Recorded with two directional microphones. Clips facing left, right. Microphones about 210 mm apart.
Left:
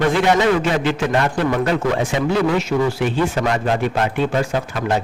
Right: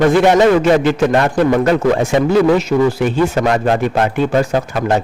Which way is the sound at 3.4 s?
50° right (ahead or behind).